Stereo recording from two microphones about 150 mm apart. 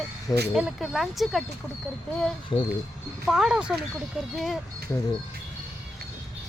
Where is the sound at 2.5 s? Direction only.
30° left (ahead or behind).